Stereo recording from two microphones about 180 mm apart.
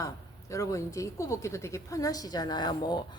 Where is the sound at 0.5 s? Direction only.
20° left (ahead or behind).